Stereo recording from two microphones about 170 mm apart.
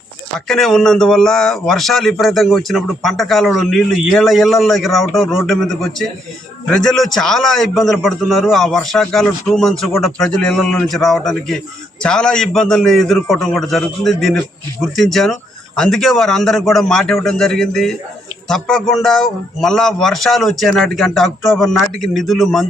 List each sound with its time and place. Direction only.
0.3 s a man's voice: centre (ahead or behind)